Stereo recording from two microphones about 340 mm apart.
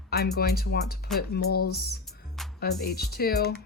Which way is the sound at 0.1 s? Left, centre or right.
Left.